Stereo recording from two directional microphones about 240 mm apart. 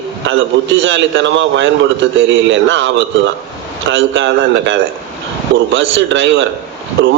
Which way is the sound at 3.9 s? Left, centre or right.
Right.